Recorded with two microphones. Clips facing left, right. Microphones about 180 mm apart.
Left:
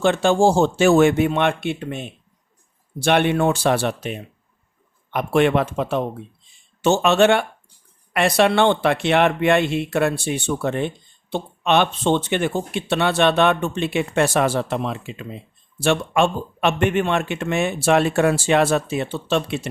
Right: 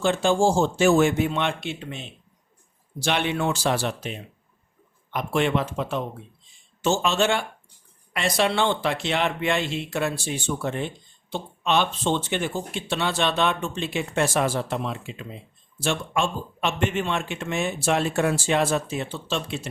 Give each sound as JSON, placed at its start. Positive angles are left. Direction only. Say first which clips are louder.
{"t": 0.0, "sound": "speech", "louder": "left 4 dB", "side_deg": 65}